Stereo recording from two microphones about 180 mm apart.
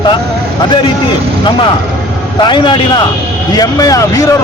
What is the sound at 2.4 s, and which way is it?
Speech, 25° left (ahead or behind).